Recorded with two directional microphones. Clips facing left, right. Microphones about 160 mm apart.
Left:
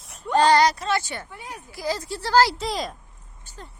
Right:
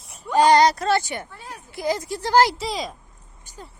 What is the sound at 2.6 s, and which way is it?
Speech, centre (ahead or behind).